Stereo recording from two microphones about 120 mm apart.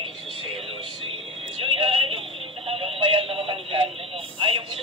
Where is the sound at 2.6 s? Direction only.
50° right (ahead or behind).